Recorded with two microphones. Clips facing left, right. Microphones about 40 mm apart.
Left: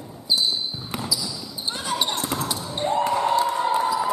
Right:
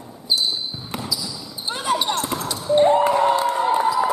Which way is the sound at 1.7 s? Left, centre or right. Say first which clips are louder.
Right 7 dB; centre.